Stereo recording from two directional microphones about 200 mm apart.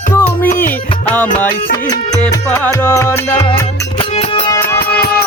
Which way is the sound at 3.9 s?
30° left (ahead or behind).